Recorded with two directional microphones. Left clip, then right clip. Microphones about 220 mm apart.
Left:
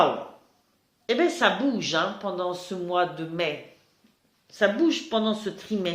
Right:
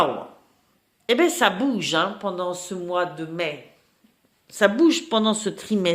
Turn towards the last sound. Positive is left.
turn(degrees=-55)  # may be behind; listen again after turning